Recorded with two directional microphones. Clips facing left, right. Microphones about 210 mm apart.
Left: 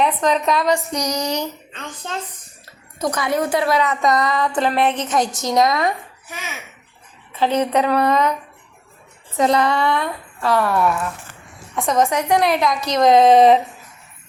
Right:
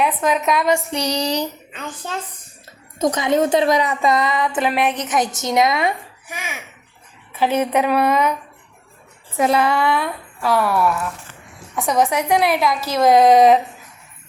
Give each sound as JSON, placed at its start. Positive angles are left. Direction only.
{"t": 0.0, "sound": "a woman's voice", "side_deg": -5}
{"t": 0.9, "sound": "a sound", "side_deg": -30}
{"t": 3.0, "sound": "a woman's voice", "side_deg": -20}
{"t": 4.4, "sound": "a woman's voice", "side_deg": -5}
{"t": 4.9, "sound": "a woman's voice", "side_deg": -20}
{"t": 7.3, "sound": "a woman's voice", "side_deg": -10}
{"t": 9.4, "sound": "a woman's voice", "side_deg": -5}